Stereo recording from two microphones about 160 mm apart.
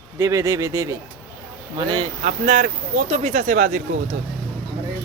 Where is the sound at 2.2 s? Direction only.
55° right (ahead or behind).